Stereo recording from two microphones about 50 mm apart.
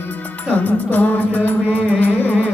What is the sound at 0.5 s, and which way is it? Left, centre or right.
Music, left.